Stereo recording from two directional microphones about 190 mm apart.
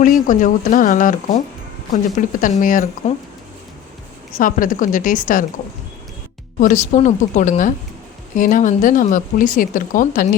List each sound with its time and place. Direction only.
0.0 s speech: 45° left (ahead or behind)
3.0 s speech: 35° left (ahead or behind)
4.4 s speech: 45° left (ahead or behind)
6.6 s speech: 40° left (ahead or behind)